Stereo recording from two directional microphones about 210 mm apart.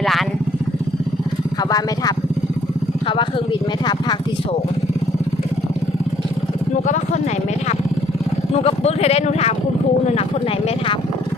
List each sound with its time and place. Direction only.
0.0 s vehicle: centre (ahead or behind)
3.1 s a sound: 25° left (ahead or behind)
6.8 s vehicle: 35° left (ahead or behind)
8.5 s speech: 30° left (ahead or behind)